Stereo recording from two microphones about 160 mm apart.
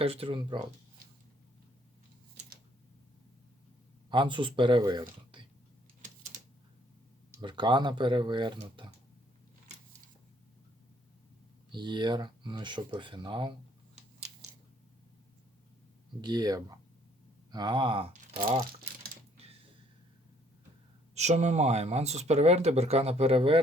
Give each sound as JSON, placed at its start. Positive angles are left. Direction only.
{"t": 0.0, "sound": "speech", "side_deg": -35}
{"t": 4.1, "sound": "speech", "side_deg": -30}
{"t": 7.4, "sound": "speech", "side_deg": -30}
{"t": 11.7, "sound": "speech", "side_deg": -30}
{"t": 16.2, "sound": "speech", "side_deg": -25}
{"t": 21.2, "sound": "speech", "side_deg": -45}